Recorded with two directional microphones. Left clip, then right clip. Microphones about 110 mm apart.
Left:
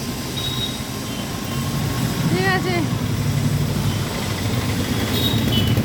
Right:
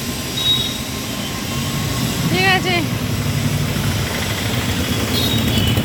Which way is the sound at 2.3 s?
25° left (ahead or behind).